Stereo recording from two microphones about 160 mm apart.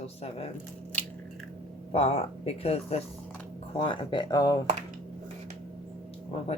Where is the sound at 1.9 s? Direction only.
35° left (ahead or behind).